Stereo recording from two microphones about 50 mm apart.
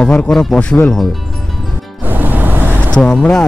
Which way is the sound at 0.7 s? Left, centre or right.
Left.